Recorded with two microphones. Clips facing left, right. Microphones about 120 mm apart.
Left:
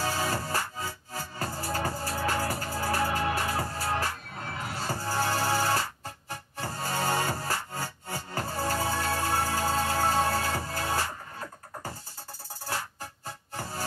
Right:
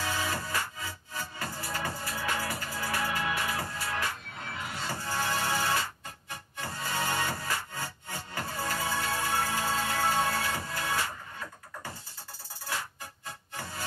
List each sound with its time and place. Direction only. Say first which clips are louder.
0.0 s music: left 3 dB; 35° left (ahead or behind)